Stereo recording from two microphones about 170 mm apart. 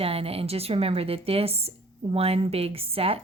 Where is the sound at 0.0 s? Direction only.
35° right (ahead or behind).